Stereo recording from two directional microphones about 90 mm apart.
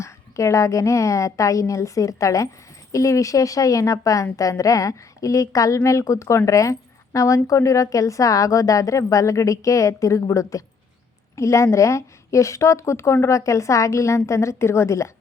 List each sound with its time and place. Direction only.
0.0 s a woman's voice: 35° left (ahead or behind)